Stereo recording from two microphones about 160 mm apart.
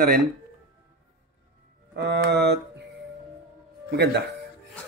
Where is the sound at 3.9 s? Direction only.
90° right.